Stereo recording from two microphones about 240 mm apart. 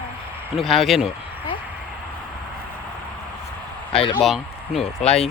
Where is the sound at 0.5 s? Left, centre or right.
Centre.